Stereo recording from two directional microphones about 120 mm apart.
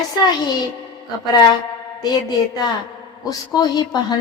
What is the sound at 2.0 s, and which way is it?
A woman's voice, 35° left (ahead or behind).